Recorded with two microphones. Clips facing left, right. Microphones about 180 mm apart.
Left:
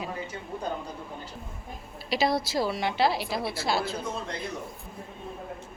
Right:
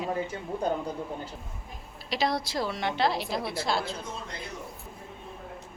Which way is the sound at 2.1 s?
5° left (ahead or behind).